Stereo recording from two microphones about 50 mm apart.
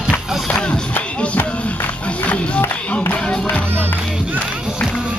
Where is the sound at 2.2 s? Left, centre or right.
Left.